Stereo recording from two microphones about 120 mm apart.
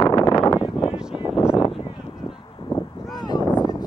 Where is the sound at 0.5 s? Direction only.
5° right (ahead or behind).